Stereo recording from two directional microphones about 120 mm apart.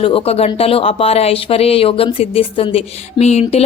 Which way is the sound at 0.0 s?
50° left (ahead or behind).